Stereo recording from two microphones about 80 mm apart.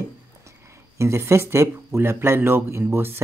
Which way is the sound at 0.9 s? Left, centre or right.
Right.